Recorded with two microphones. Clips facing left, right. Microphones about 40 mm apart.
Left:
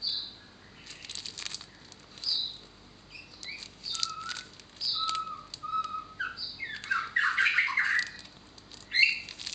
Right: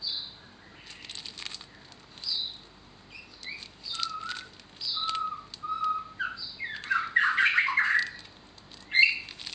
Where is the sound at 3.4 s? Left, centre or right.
Centre.